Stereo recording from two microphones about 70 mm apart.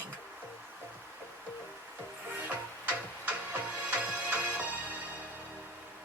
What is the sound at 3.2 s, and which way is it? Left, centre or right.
Music, right.